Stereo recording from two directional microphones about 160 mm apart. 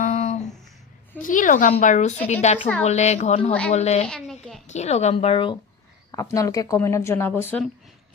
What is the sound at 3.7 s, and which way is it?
Speech, 45° left (ahead or behind).